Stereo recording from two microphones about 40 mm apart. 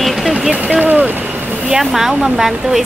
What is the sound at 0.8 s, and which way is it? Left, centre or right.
Speech, right.